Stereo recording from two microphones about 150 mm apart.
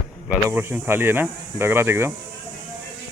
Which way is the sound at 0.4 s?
15° right (ahead or behind).